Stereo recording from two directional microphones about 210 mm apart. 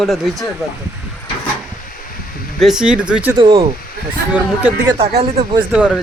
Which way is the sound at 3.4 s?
25° right (ahead or behind).